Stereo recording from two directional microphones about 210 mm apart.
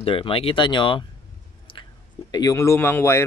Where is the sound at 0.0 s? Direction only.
25° left (ahead or behind).